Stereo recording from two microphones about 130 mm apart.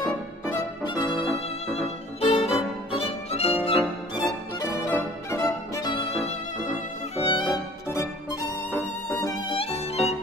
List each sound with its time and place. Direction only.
2.1 s violin: 50° left (ahead or behind)
3.0 s music: 50° left (ahead or behind)
4.9 s music: 20° left (ahead or behind)
5.9 s violin: 40° left (ahead or behind)
7.2 s violin: 40° left (ahead or behind)
7.9 s music: 25° left (ahead or behind)
9.5 s music: 50° left (ahead or behind)